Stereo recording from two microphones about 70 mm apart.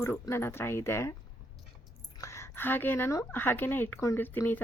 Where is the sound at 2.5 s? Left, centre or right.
Left.